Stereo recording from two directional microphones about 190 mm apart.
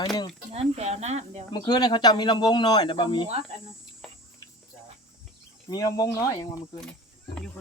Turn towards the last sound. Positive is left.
turn(degrees=15)  # may be behind; listen again after turning